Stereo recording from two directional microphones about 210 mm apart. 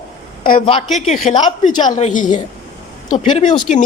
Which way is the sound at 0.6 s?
30° left (ahead or behind).